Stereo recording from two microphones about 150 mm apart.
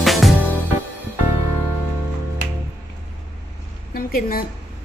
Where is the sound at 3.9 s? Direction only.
75° left (ahead or behind).